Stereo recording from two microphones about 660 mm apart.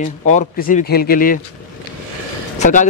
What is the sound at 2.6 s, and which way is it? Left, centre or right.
Speech, centre.